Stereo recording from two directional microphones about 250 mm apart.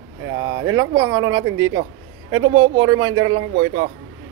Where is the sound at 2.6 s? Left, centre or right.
Right.